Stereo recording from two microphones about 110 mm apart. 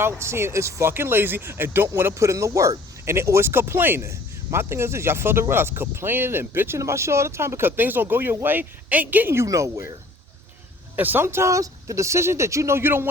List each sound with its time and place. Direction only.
0.0 s speech: 25° right (ahead or behind)
10.9 s speech: 15° right (ahead or behind)